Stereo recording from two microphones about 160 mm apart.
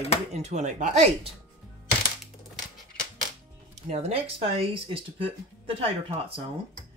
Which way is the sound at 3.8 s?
40° right (ahead or behind).